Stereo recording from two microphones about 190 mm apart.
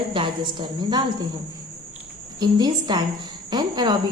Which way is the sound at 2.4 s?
20° right (ahead or behind).